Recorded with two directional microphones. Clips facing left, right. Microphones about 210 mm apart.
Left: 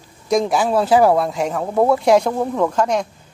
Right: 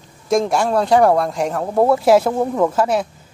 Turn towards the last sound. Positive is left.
turn(degrees=-5)  # may be behind; listen again after turning